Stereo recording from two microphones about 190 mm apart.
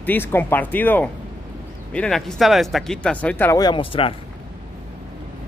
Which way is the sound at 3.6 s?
25° left (ahead or behind).